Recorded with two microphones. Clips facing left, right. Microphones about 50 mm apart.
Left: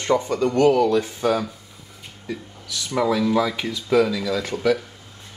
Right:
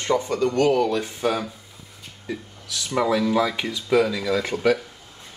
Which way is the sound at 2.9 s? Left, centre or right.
Centre.